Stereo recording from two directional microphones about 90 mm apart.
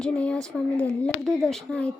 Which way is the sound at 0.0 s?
10° left (ahead or behind).